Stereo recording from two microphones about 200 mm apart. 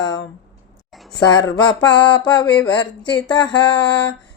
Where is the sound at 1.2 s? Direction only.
20° left (ahead or behind).